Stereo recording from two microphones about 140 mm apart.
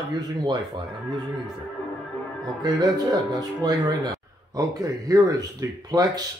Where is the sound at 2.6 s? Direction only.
30° right (ahead or behind).